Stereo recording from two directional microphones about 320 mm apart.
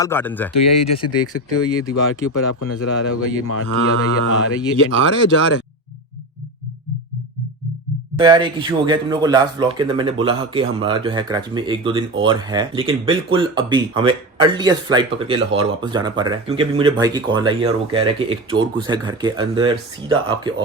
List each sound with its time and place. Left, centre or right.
0.0 s speech: centre
1.0 s cattle: left
8.2 s speech: centre